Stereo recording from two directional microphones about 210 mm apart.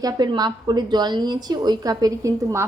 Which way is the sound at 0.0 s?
20° right (ahead or behind).